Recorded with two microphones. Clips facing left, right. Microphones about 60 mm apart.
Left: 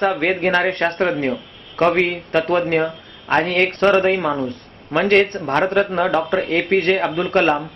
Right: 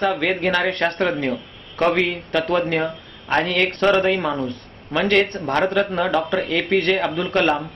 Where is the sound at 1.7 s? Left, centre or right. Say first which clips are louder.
Left 2 dB; left.